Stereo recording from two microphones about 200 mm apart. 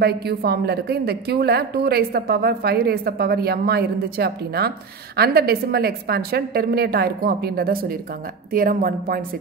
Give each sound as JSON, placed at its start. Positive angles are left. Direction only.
{"t": 0.0, "sound": "a woman's voice", "side_deg": -55}